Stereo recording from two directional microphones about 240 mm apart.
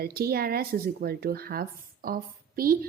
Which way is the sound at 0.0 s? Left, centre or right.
Right.